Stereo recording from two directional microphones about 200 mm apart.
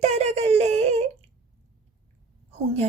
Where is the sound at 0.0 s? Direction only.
35° right (ahead or behind).